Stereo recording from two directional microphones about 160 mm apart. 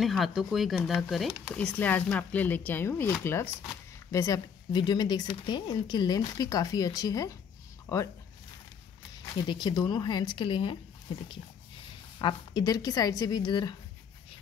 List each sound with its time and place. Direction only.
0.0 s speech: centre (ahead or behind); by 7.3 s 20° left (ahead or behind)
7.8 s a sound: 20° left (ahead or behind)
9.4 s speech: 30° left (ahead or behind)
11.1 s dog: 30° left (ahead or behind)
12.2 s speech: 30° left (ahead or behind)